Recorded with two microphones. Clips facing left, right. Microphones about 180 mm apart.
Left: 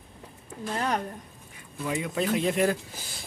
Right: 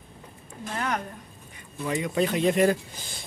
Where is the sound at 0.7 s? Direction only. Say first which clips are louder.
Left 1 dB; 30° left (ahead or behind).